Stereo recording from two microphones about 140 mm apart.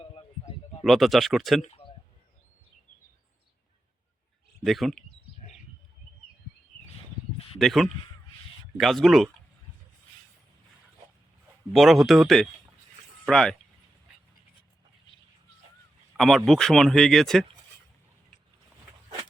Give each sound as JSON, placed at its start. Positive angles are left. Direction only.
{"t": 0.8, "sound": "speech", "side_deg": 0}
{"t": 1.6, "sound": "a sound", "side_deg": 45}
{"t": 4.6, "sound": "speech", "side_deg": 0}
{"t": 7.6, "sound": "speech", "side_deg": 0}
{"t": 11.7, "sound": "speech", "side_deg": 0}
{"t": 16.1, "sound": "speech", "side_deg": 0}